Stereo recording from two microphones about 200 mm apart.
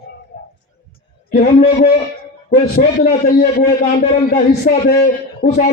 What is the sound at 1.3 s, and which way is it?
A man's voice, 45° left (ahead or behind).